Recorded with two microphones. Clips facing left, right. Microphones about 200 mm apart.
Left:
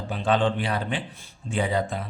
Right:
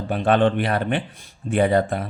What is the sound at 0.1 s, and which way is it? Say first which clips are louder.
Speech: right 5 dB; 60° right (ahead or behind).